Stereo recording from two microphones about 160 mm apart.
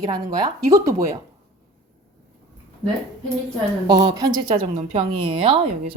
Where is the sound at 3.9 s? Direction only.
30° right (ahead or behind).